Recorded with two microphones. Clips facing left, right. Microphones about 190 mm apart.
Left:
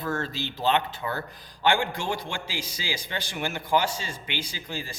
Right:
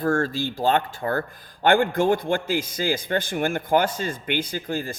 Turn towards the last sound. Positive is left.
turn(degrees=-55)  # may be behind; listen again after turning